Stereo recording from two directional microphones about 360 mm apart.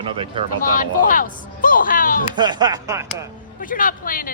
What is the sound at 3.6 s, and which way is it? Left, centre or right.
Speech, left.